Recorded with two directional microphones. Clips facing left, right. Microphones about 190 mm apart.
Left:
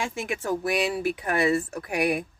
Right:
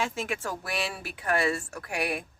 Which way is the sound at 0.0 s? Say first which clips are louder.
Left 1 dB; 15° left (ahead or behind).